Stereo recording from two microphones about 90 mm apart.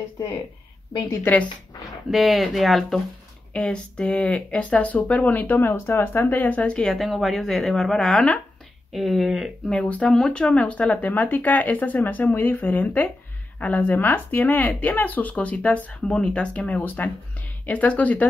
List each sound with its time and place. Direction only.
1.2 s speech: 15° left (ahead or behind)
1.9 s speech: centre (ahead or behind); by 18.2 s 15° left (ahead or behind)